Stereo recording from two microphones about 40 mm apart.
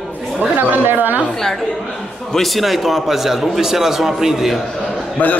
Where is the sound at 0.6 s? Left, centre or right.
Right.